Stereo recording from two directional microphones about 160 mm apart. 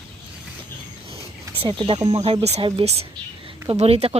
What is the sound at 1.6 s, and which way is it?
Speech, 30° right (ahead or behind).